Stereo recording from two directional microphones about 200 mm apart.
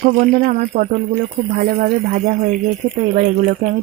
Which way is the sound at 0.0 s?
45° right (ahead or behind).